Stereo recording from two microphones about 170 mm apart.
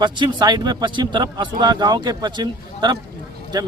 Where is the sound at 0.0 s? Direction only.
25° right (ahead or behind).